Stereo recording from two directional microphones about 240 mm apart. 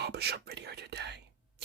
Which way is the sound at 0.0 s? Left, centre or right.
Right.